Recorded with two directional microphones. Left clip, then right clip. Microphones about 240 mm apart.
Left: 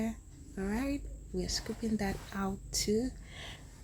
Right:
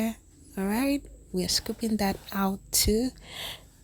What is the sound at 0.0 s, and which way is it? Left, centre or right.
A woman's voice, right.